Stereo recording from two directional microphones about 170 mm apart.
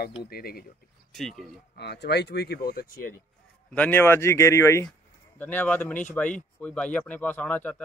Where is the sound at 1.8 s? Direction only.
80° left; by 2.9 s 65° left (ahead or behind).